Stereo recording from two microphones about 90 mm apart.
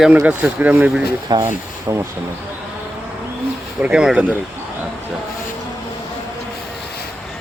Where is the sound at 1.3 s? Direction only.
50° right (ahead or behind).